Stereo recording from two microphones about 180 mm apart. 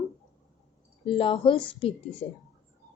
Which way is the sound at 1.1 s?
30° left (ahead or behind).